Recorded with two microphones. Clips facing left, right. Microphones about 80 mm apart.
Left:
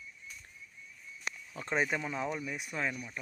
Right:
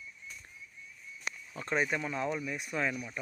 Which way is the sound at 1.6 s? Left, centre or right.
Centre.